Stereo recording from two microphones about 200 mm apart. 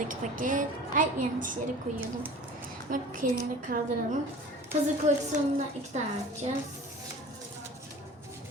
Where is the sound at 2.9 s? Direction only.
45° right (ahead or behind).